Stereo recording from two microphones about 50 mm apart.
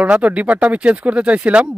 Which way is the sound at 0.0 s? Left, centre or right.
Right.